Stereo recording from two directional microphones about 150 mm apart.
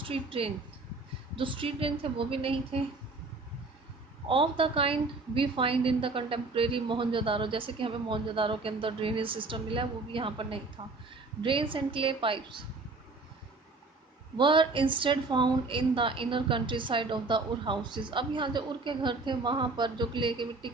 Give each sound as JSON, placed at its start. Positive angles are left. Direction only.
{"t": 0.1, "sound": "a woman's voice", "side_deg": -40}
{"t": 4.3, "sound": "a woman's voice", "side_deg": -35}
{"t": 14.3, "sound": "a woman's voice", "side_deg": -35}